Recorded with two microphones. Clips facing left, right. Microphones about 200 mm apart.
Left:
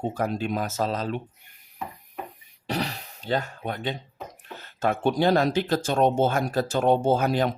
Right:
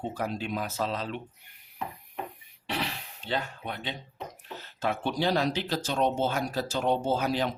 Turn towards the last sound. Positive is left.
turn(degrees=50)  # may be behind; listen again after turning